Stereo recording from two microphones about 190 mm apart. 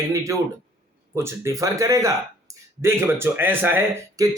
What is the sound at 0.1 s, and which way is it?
A woman's voice, 15° right (ahead or behind).